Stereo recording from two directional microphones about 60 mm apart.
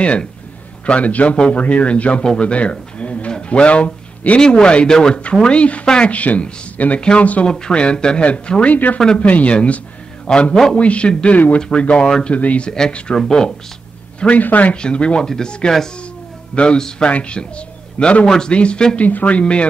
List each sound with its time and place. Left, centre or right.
0.0 s speech: centre
2.2 s a sound: centre
4.4 s speech: centre; by 9.0 s left
9.0 s speech: centre
14.2 s a man's voice: left